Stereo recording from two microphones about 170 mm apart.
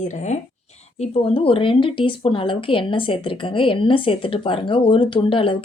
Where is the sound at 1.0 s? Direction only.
35° left (ahead or behind).